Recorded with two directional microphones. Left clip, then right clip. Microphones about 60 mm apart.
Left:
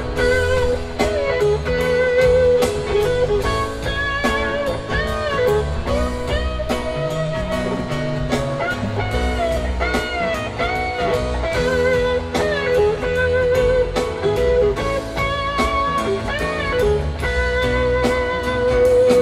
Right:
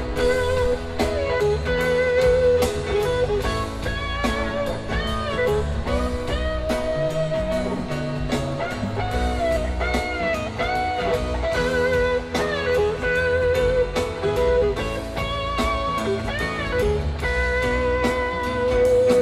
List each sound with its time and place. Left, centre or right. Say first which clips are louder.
0.9 s music: left 4 dB; centre
9.9 s music: left 2 dB; right
15.5 s music: left 3 dB; right
17.4 s music: left 3 dB; centre